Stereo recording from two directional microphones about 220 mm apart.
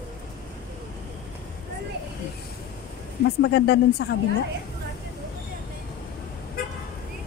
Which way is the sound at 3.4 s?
50° left (ahead or behind).